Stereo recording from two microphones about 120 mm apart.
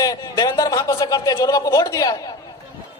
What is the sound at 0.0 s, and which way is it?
A man's voice, 30° left (ahead or behind).